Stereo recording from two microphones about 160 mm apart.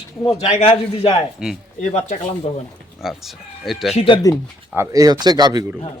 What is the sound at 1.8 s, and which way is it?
Speech, 45° left (ahead or behind).